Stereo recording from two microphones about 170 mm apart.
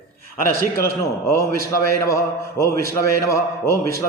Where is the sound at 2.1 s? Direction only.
20° left (ahead or behind).